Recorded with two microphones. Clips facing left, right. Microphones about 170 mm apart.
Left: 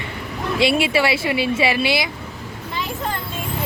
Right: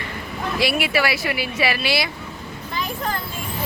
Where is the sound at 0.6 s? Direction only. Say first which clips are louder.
Left 4 dB; 25° left (ahead or behind).